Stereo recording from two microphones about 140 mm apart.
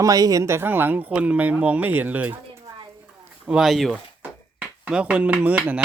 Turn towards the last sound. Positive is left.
turn(degrees=-10)  # may be behind; listen again after turning